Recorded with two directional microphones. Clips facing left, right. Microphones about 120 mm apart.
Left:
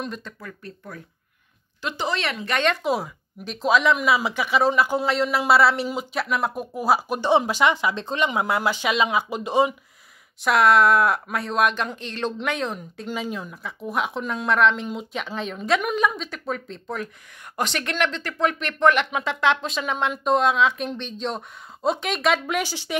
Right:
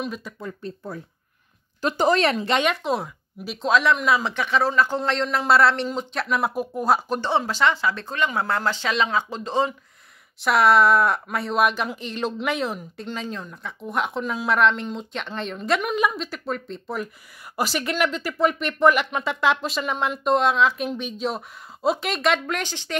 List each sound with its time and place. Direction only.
0.0 s speech: 5° right (ahead or behind)
0.4 s speech: 25° right (ahead or behind)
1.8 s speech: 45° right (ahead or behind)
2.8 s speech: centre (ahead or behind)
10.4 s speech: centre (ahead or behind)